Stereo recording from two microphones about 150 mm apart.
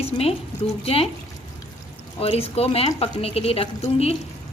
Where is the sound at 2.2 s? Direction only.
40° left (ahead or behind).